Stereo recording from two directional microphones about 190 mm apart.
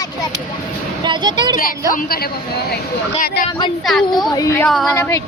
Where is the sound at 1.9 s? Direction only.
50° left (ahead or behind).